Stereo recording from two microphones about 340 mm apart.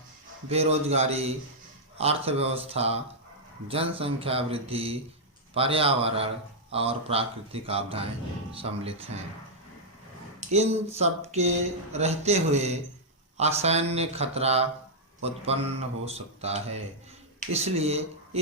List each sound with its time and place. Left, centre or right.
0.4 s speech: centre
10.4 s speech: centre